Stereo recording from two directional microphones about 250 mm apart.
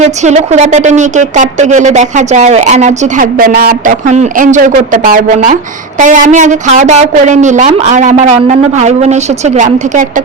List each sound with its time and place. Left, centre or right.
0.0 s a woman's voice: right